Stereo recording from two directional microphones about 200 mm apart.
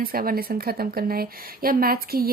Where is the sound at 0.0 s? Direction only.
50° right (ahead or behind).